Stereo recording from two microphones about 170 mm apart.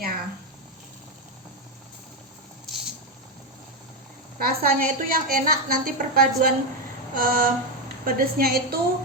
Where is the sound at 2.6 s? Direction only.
Centre (ahead or behind).